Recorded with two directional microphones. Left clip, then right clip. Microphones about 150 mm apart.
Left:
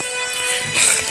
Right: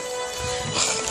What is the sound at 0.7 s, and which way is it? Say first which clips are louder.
Music: left 7 dB; centre (ahead or behind).